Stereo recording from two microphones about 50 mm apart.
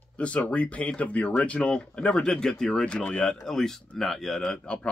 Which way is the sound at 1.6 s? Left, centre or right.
Centre.